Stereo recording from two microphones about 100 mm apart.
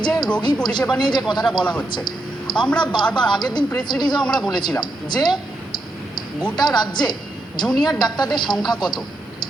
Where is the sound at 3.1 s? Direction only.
50° left (ahead or behind).